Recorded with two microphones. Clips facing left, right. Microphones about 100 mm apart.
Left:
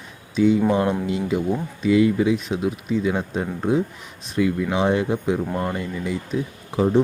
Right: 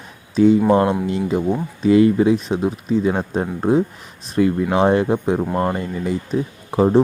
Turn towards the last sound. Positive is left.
turn(degrees=-45)  # may be behind; listen again after turning